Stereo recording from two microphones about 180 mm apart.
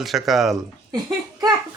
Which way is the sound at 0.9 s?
20° right (ahead or behind).